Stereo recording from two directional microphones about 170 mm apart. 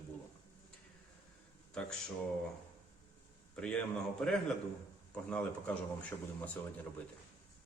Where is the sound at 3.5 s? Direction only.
5° left (ahead or behind).